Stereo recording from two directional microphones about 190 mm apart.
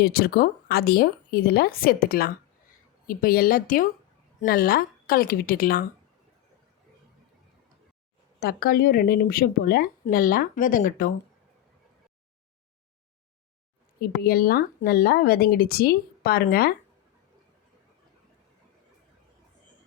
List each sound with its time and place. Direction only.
0.0 s speech: 55° left (ahead or behind)
8.4 s speech: 50° left (ahead or behind)
14.0 s speech: 55° left (ahead or behind)